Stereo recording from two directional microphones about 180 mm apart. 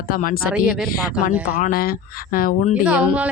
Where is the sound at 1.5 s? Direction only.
55° left (ahead or behind).